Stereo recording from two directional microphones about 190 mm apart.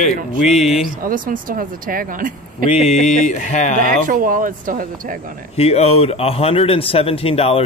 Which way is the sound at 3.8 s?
45° right (ahead or behind).